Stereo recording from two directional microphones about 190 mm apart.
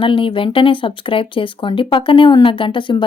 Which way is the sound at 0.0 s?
25° left (ahead or behind).